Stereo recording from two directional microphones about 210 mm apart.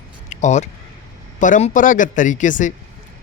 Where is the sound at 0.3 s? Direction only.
35° left (ahead or behind).